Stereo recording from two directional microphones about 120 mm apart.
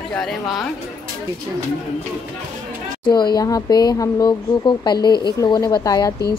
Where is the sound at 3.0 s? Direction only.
35° left (ahead or behind).